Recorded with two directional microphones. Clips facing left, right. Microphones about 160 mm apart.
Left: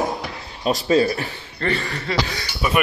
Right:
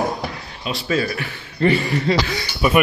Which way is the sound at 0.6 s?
40° left (ahead or behind).